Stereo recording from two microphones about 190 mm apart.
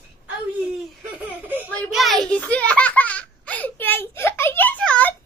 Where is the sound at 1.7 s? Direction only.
5° left (ahead or behind).